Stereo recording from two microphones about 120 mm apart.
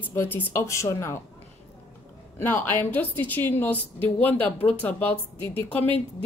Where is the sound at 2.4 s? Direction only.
15° left (ahead or behind).